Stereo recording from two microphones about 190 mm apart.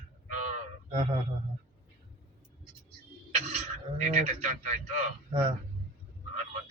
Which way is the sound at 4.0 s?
40° right (ahead or behind).